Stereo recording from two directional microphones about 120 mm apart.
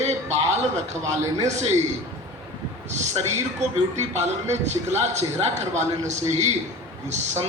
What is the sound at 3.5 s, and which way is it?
A man's voice, 70° right (ahead or behind).